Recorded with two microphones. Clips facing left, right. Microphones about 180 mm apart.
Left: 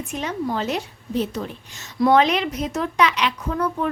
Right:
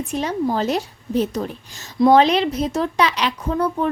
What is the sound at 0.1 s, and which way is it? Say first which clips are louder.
Speech: right 4 dB; 35° right (ahead or behind).